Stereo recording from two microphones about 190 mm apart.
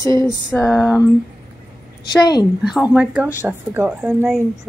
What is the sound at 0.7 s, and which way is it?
Speech, centre (ahead or behind).